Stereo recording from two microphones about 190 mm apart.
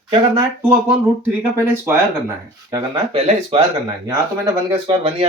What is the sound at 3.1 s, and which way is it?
Speech, 30° right (ahead or behind).